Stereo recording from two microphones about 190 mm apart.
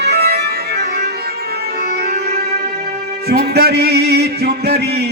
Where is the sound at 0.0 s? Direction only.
55° right (ahead or behind).